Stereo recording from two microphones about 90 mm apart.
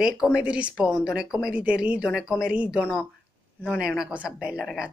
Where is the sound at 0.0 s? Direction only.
10° right (ahead or behind).